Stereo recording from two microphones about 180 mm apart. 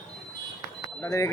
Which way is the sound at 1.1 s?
15° left (ahead or behind).